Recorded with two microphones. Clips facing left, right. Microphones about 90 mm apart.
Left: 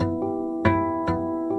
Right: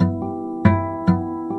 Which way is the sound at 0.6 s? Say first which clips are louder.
Right 3 dB; 15° right (ahead or behind).